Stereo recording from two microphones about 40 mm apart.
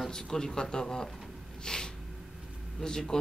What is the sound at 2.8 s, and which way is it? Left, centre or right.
Speech, centre.